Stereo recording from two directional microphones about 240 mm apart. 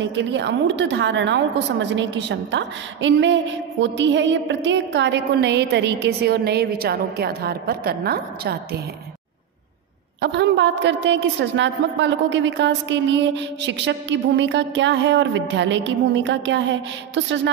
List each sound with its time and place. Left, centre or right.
0.0 s a woman's voice: right
10.2 s a woman's voice: right